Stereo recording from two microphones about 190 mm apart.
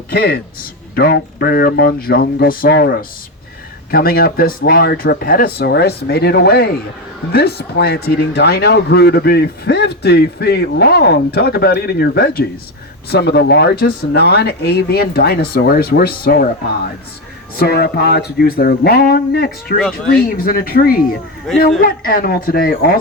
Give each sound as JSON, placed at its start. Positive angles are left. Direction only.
{"t": 0.1, "sound": "speech", "side_deg": 55}
{"t": 17.6, "sound": "speech", "side_deg": 55}
{"t": 19.8, "sound": "speech", "side_deg": 5}
{"t": 20.2, "sound": "speech", "side_deg": 50}